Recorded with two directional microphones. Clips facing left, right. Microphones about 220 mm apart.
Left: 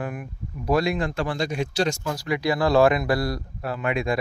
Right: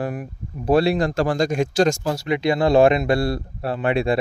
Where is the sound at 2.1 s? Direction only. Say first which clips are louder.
Right 4 dB; 25° right (ahead or behind).